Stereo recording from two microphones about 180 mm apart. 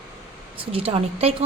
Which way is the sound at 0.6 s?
30° right (ahead or behind).